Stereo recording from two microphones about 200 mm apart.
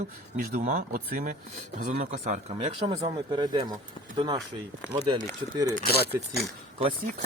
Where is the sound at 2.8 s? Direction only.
25° right (ahead or behind).